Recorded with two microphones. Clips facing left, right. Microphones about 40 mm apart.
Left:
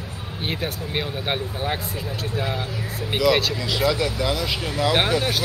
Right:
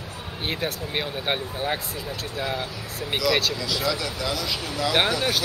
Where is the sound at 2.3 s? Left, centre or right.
Centre.